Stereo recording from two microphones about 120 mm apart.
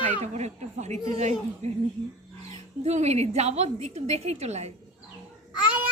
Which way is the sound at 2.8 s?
65° right (ahead or behind).